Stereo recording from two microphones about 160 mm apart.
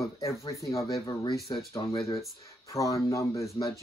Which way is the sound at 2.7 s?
20° left (ahead or behind).